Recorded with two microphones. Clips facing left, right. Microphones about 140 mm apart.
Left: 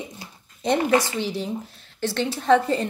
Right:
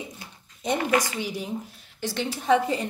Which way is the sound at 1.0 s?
15° right (ahead or behind).